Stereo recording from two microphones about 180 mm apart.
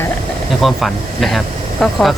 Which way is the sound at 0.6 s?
Centre (ahead or behind).